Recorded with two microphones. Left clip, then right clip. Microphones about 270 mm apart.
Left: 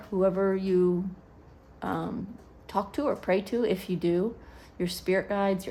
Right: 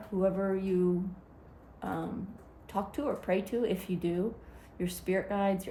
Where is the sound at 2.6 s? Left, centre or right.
Left.